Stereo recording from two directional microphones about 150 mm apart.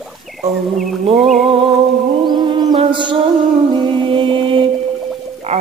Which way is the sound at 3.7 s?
30° right (ahead or behind).